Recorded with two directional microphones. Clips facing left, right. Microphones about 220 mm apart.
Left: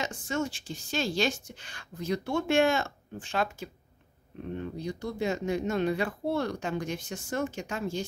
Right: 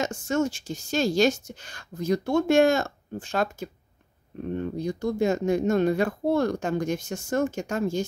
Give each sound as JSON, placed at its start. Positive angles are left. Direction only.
{"t": 0.0, "sound": "speech", "side_deg": -45}